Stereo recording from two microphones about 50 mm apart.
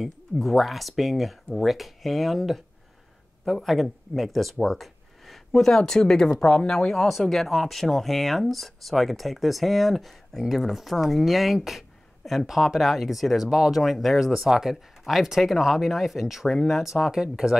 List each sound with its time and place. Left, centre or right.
0.0 s speech: centre
7.1 s speech: centre